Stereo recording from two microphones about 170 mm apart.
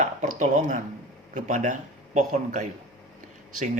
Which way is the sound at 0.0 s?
45° right (ahead or behind).